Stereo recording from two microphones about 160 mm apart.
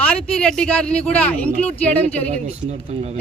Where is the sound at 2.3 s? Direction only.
40° right (ahead or behind).